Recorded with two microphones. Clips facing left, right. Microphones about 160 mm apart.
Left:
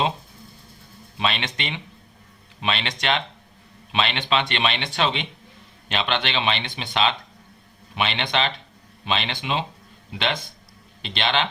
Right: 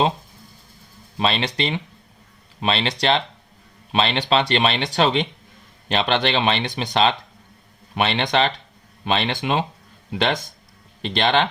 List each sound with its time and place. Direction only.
1.2 s speech: 35° right (ahead or behind)